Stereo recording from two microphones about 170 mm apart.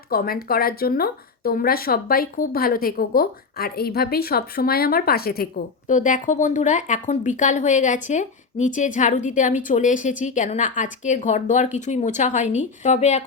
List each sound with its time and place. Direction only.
0.1 s speech: 60° left (ahead or behind)
5.9 s speech: 50° left (ahead or behind)